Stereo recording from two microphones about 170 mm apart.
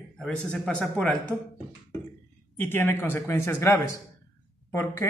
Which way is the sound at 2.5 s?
15° left (ahead or behind).